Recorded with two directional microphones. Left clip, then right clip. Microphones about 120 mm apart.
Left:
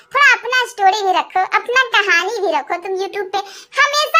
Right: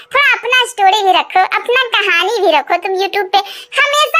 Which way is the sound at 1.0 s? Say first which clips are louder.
Right 5 dB; 25° right (ahead or behind).